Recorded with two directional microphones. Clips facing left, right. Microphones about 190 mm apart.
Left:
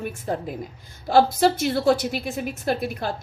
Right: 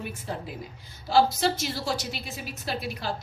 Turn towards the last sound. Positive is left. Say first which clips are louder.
# left 7 dB
turn(degrees=50)  # may be behind; listen again after turning